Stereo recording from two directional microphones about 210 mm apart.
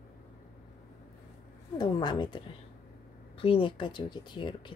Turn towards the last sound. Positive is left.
turn(degrees=20)  # may be behind; listen again after turning